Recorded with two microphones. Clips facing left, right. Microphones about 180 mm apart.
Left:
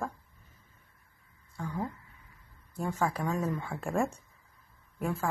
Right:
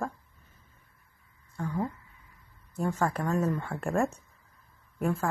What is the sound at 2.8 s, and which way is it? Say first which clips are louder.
Speech: right 2 dB; 10° left (ahead or behind).